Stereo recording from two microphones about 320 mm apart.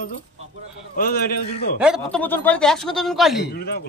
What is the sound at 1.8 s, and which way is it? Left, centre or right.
Speech, centre.